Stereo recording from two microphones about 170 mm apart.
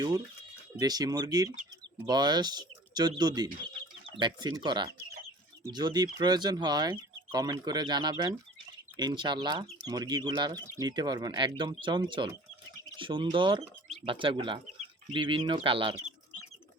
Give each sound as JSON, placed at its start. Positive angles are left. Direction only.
{"t": 0.8, "sound": "speech", "side_deg": -25}